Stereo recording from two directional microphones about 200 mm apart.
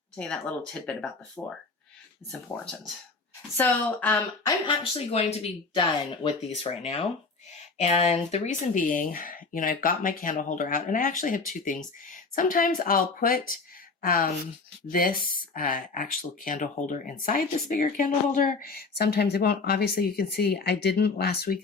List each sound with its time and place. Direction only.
0.2 s speech: 5° left (ahead or behind)
3.6 s speech: 10° left (ahead or behind)
4.6 s speech: 25° left (ahead or behind); by 21.6 s 50° left (ahead or behind)